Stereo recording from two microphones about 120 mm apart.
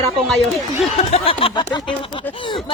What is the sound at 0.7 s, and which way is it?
Speech, 60° left (ahead or behind).